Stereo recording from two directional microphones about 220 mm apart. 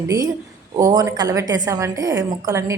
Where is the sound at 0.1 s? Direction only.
15° right (ahead or behind).